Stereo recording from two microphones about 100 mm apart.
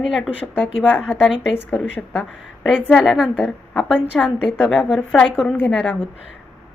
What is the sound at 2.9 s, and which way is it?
A woman's voice, 5° left (ahead or behind).